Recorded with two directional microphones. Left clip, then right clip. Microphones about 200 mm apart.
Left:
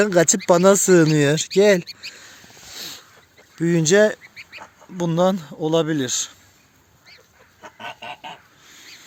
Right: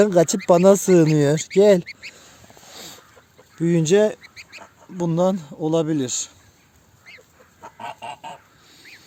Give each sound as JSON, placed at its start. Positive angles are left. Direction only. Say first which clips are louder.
{"t": 0.0, "sound": "speech", "louder": "even", "side_deg": -5}
{"t": 3.5, "sound": "speech", "louder": "left 1 dB", "side_deg": -5}
{"t": 4.2, "sound": "duck", "louder": "left 2 dB", "side_deg": -45}
{"t": 4.9, "sound": "speech", "louder": "left 1 dB", "side_deg": 0}
{"t": 7.6, "sound": "goose", "louder": "right 1 dB", "side_deg": -35}